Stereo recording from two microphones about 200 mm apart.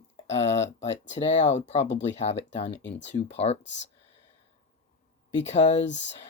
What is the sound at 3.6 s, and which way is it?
Speech, 65° left (ahead or behind).